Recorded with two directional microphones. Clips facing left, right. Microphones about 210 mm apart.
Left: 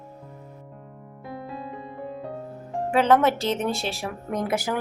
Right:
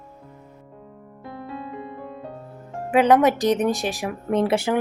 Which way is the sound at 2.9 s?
15° right (ahead or behind).